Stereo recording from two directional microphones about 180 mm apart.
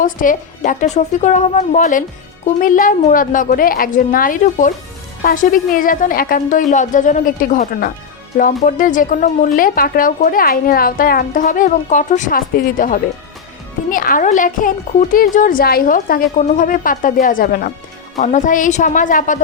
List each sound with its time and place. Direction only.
0.0 s speech: 50° left (ahead or behind)
18.2 s speech: 40° left (ahead or behind)